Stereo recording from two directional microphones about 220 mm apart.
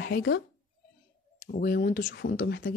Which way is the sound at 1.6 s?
40° left (ahead or behind).